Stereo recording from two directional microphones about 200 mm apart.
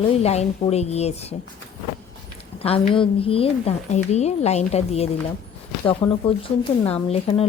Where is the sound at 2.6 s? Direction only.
30° left (ahead or behind).